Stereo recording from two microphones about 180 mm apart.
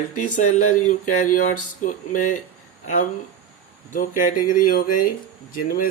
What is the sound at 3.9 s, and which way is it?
Speech, 45° left (ahead or behind).